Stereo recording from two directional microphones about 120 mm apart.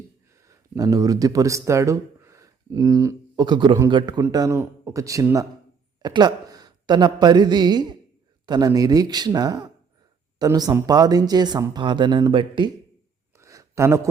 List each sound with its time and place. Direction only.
0.3 s speech: 25° right (ahead or behind)
3.4 s speech: 40° right (ahead or behind)
13.3 s a sound: 25° right (ahead or behind)